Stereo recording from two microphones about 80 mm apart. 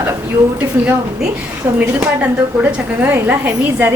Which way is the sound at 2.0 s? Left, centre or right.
Centre.